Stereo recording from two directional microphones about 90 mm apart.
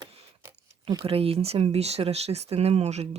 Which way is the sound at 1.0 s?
90° right.